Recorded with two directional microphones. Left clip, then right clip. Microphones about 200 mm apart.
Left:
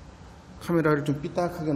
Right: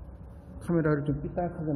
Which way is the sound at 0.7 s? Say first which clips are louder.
Left 4 dB; 5° left (ahead or behind).